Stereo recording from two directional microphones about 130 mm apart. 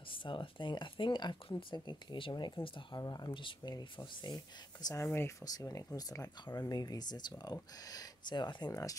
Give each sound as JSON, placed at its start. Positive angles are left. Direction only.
{"t": 0.1, "sound": "speech", "side_deg": 40}
{"t": 4.8, "sound": "speech", "side_deg": 20}
{"t": 5.4, "sound": "speech", "side_deg": 30}